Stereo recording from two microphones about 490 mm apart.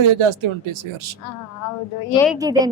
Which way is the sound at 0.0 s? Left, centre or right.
Right.